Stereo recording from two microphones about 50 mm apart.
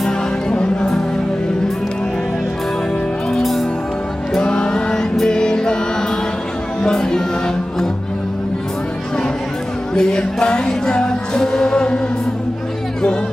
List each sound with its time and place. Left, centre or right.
0.5 s music: left
3.3 s music: centre
4.4 s music: centre
6.8 s music: centre
9.9 s music: centre